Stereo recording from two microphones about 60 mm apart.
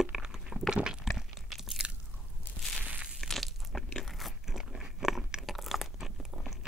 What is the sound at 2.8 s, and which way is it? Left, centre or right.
Crushing, centre.